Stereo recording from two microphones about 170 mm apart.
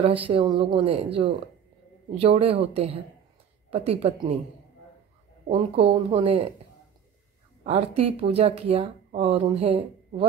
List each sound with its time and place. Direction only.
0.0 s speech: 35° right (ahead or behind)
5.5 s speech: 35° right (ahead or behind)
7.6 s speech: 35° right (ahead or behind)